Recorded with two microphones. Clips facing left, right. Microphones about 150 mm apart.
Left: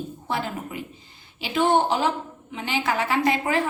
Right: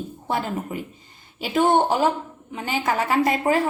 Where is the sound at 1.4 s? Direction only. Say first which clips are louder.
Right 2 dB; 45° right (ahead or behind).